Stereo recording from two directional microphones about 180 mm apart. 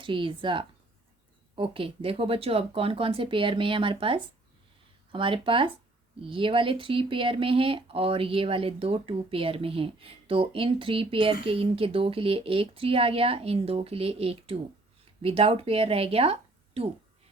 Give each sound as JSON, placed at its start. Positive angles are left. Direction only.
{"t": 0.0, "sound": "speech", "side_deg": -25}